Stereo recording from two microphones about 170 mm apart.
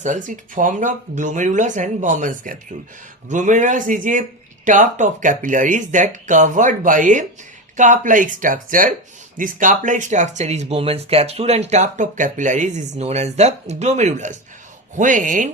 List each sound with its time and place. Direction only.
0.0 s speech: 50° right (ahead or behind)